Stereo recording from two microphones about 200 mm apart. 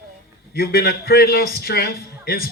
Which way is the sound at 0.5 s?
50° left (ahead or behind).